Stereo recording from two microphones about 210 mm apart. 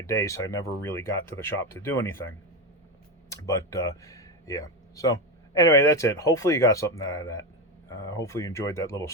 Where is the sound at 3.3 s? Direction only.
15° left (ahead or behind).